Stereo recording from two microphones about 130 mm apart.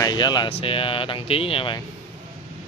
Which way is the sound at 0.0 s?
35° left (ahead or behind).